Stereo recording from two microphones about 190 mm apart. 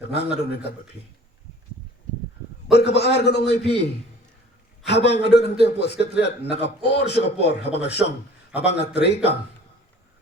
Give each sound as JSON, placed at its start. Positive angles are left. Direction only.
{"t": 0.1, "sound": "a man's voice", "side_deg": 60}
{"t": 2.7, "sound": "a man's voice", "side_deg": 60}
{"t": 4.9, "sound": "a man's voice", "side_deg": 65}